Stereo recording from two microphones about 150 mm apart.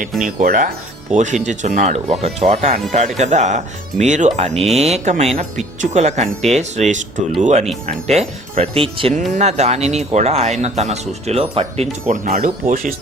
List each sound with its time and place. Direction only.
0.4 s speech: 60° right (ahead or behind); by 11.9 s 45° right (ahead or behind)
12.0 s speech: 60° right (ahead or behind)